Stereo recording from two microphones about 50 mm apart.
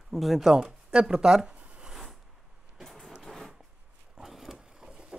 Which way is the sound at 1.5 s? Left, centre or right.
Right.